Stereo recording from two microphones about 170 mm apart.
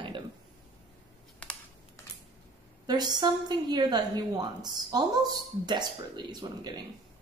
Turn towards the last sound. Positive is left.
turn(degrees=-25)  # may be behind; listen again after turning